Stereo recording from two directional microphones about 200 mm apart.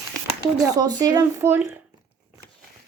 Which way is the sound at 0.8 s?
20° right (ahead or behind).